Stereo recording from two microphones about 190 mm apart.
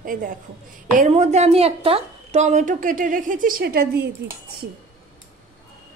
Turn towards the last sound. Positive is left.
turn(degrees=-55)  # may be behind; listen again after turning